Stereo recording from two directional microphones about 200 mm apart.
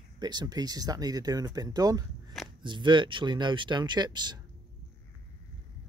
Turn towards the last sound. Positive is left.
turn(degrees=-20)  # may be behind; listen again after turning